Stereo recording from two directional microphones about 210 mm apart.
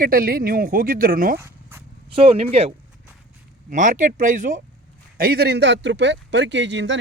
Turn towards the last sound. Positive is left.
turn(degrees=-60)  # may be behind; listen again after turning